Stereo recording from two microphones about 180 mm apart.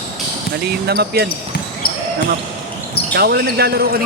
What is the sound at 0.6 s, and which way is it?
Speech, 60° right (ahead or behind).